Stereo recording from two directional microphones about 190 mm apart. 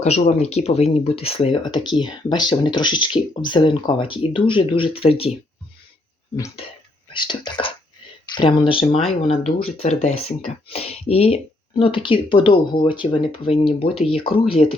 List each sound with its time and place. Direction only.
0.0 s speech: 35° left (ahead or behind)
7.1 s speech: 25° left (ahead or behind)